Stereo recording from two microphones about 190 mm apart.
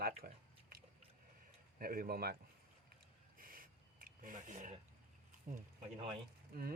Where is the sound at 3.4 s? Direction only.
50° right (ahead or behind).